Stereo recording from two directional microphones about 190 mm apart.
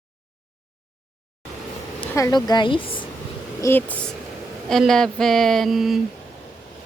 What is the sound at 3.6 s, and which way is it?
Speech, 10° left (ahead or behind).